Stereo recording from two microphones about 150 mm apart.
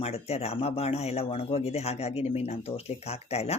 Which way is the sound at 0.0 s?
45° left (ahead or behind).